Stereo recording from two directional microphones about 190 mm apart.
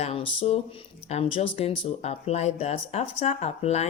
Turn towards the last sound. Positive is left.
turn(degrees=35)  # may be behind; listen again after turning